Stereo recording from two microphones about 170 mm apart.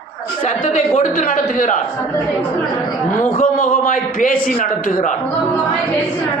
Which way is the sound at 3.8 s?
55° left (ahead or behind).